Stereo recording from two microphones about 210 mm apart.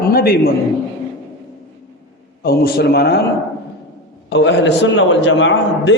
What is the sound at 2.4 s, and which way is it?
Speech, 45° left (ahead or behind).